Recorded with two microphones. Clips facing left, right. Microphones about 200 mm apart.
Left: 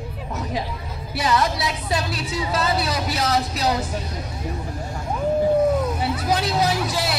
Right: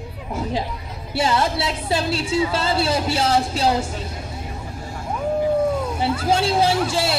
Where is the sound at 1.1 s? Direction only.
30° right (ahead or behind).